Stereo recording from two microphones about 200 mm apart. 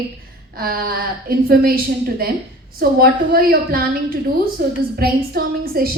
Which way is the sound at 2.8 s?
50° right (ahead or behind).